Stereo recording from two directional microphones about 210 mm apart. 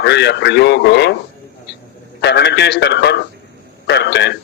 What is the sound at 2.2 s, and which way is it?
A man's voice, 55° left (ahead or behind).